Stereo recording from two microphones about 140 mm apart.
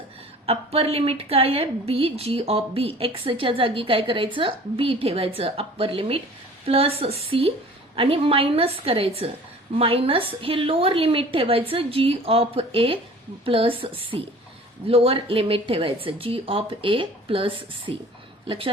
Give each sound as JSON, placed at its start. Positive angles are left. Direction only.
{"t": 0.4, "sound": "a woman's voice", "side_deg": -45}